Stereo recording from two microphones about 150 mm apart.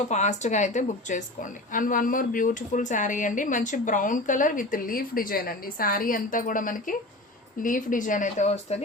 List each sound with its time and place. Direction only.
0.0 s a woman's voice: 50° left (ahead or behind)